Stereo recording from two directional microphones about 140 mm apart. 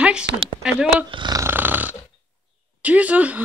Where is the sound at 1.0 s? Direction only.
35° right (ahead or behind).